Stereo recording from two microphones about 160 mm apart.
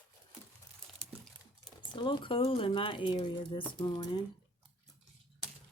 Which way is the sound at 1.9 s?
30° left (ahead or behind).